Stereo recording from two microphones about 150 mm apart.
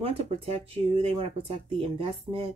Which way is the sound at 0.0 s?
40° right (ahead or behind).